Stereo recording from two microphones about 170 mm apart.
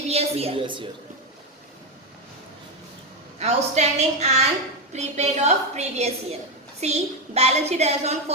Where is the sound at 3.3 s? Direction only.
40° right (ahead or behind).